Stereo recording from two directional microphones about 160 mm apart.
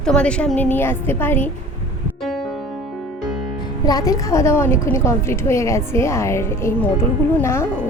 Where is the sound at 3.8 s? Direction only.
25° left (ahead or behind).